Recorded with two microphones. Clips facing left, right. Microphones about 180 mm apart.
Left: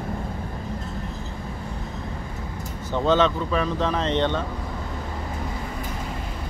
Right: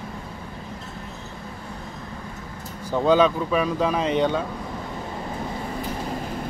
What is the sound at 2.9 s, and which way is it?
Speech, 10° right (ahead or behind).